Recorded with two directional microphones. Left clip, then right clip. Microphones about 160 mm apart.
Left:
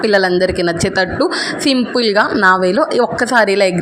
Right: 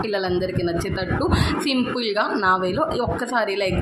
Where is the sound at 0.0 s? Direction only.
50° left (ahead or behind).